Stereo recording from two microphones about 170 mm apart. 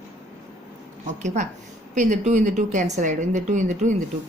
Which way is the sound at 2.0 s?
45° right (ahead or behind).